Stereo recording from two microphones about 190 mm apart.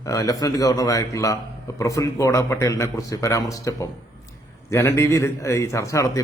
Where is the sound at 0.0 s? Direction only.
15° left (ahead or behind).